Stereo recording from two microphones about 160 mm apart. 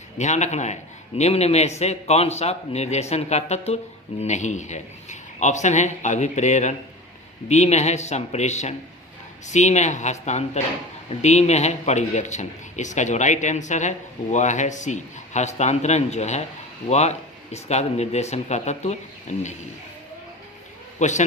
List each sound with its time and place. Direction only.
0.2 s speech: 45° left (ahead or behind)
21.0 s speech: 50° left (ahead or behind)